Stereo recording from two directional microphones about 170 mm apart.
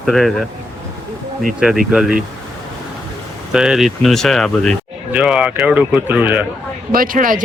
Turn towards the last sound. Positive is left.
turn(degrees=-55)  # may be behind; listen again after turning